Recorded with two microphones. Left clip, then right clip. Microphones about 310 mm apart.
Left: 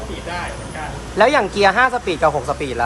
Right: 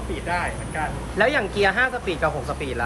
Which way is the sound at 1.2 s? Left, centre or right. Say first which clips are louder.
Left 6 dB; centre.